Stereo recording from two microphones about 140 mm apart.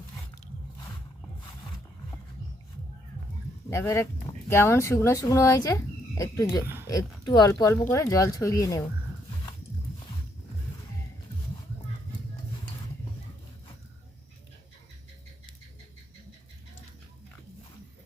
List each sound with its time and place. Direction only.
3.7 s speech: 20° left (ahead or behind)